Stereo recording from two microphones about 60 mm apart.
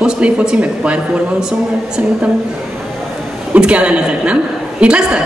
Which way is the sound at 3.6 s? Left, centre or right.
Centre.